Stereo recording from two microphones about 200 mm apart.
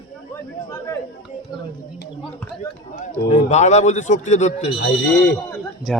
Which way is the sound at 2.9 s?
35° left (ahead or behind).